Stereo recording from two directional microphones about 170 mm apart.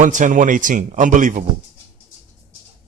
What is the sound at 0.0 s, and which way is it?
A man's voice, 50° right (ahead or behind).